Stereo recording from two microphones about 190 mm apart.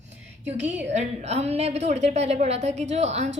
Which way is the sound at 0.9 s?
35° right (ahead or behind).